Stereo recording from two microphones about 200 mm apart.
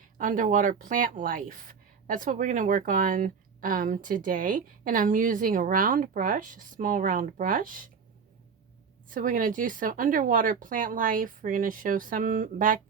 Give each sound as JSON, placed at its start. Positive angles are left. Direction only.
{"t": 0.2, "sound": "speech", "side_deg": -40}
{"t": 9.0, "sound": "speech", "side_deg": -45}